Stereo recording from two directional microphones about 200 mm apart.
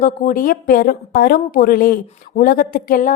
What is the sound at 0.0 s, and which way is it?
A woman's voice, 45° left (ahead or behind).